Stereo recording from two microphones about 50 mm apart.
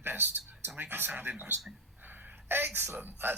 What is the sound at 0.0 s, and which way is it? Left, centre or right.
Speech, right.